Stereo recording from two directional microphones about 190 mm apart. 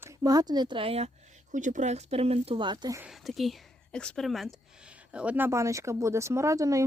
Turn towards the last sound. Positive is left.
turn(degrees=-15)  # may be behind; listen again after turning